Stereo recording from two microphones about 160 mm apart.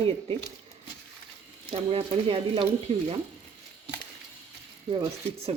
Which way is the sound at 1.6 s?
35° right (ahead or behind).